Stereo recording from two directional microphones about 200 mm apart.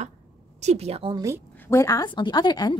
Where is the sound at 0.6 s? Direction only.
30° right (ahead or behind).